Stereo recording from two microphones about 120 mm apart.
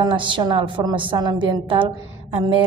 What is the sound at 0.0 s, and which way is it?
A woman's voice, 40° right (ahead or behind).